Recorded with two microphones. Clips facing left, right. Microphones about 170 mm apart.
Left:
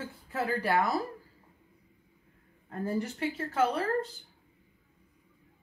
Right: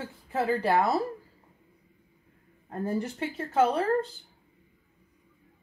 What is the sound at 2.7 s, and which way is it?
A woman's voice, 30° right (ahead or behind).